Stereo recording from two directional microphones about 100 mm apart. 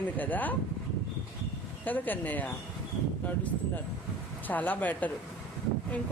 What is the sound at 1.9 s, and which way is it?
Speech, 15° left (ahead or behind).